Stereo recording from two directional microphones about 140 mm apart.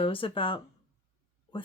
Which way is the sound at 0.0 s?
40° left (ahead or behind).